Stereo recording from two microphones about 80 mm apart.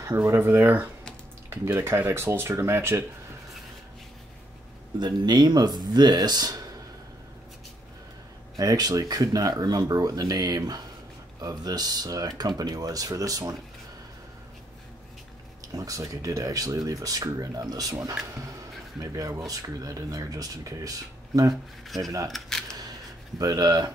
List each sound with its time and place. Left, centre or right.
0.1 s speech: right
4.9 s speech: right
8.5 s speech: right
15.7 s speech: right
18.9 s speech: right
21.8 s speech: centre
23.4 s speech: right